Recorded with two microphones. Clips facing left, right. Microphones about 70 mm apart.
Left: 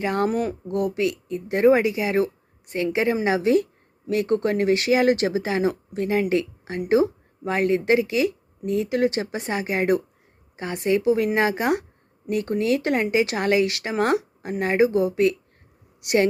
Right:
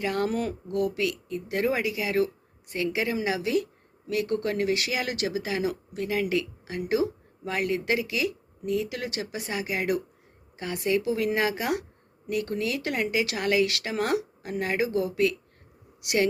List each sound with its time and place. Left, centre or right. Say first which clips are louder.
0.0 s speech: left 4 dB; left